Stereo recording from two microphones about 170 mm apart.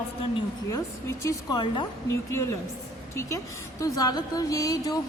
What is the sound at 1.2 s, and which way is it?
A woman's voice, 20° left (ahead or behind).